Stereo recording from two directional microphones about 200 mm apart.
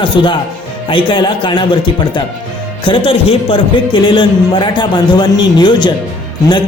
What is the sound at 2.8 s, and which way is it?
A man's voice, 25° left (ahead or behind).